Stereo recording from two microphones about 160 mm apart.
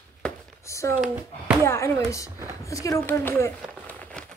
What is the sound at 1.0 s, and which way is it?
Speech, 5° right (ahead or behind).